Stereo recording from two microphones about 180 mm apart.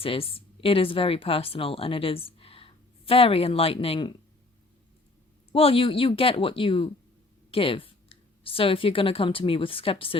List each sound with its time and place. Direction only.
0.0 s speech: 30° left (ahead or behind)
5.5 s speech: 30° left (ahead or behind)